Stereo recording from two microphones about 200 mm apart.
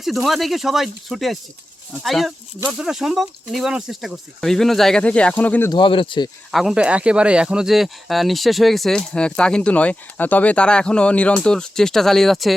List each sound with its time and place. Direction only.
0.0 s speech: centre (ahead or behind)
5.7 s speech: 25° left (ahead or behind)
6.5 s speech: centre (ahead or behind)